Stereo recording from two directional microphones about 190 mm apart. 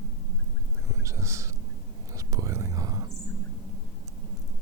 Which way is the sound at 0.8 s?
15° right (ahead or behind).